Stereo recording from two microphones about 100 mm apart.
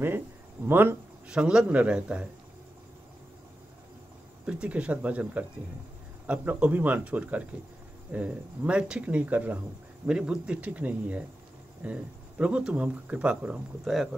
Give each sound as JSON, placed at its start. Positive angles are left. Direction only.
{"t": 0.7, "sound": "speech", "side_deg": -20}
{"t": 1.3, "sound": "speech", "side_deg": -10}
{"t": 4.5, "sound": "speech", "side_deg": -10}